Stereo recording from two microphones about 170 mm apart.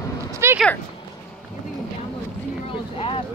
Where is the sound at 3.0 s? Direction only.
35° left (ahead or behind).